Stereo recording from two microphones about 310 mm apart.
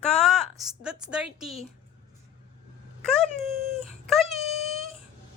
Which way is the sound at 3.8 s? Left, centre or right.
Centre.